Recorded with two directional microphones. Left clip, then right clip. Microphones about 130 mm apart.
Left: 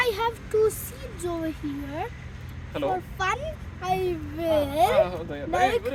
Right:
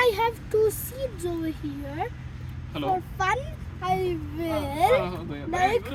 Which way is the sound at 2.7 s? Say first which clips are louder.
Right 1 dB; 30° left (ahead or behind).